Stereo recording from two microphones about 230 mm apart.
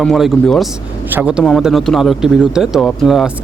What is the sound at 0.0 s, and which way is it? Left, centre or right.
Speech, centre.